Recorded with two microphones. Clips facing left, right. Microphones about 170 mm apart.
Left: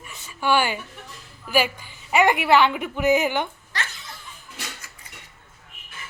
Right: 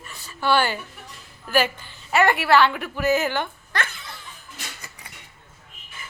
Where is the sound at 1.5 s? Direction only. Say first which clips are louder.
Even; 10° left (ahead or behind).